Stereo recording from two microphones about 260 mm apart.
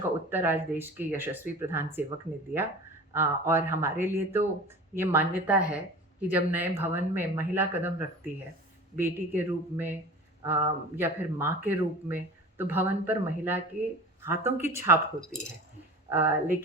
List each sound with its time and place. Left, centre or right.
0.3 s speech: centre
2.5 s speech: right
3.1 s speech: centre
16.0 s speech: centre